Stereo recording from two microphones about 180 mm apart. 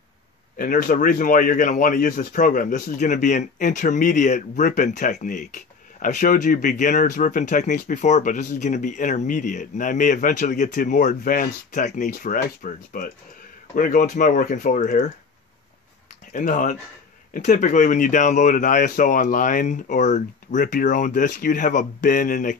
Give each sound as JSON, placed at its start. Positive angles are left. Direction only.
{"t": 0.6, "sound": "speech", "side_deg": 50}
{"t": 16.3, "sound": "speech", "side_deg": 45}